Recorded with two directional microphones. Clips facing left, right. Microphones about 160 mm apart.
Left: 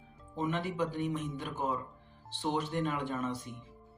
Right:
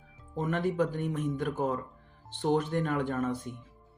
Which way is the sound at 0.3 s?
50° right (ahead or behind).